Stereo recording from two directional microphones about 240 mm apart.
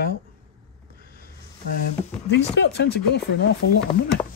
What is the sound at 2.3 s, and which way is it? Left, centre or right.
Speech, left.